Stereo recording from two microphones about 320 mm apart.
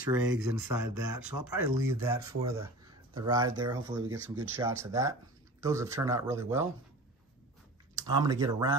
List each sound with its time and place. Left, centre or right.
0.1 s speech: centre
0.7 s speech: right
1.6 s speech: centre
7.9 s speech: centre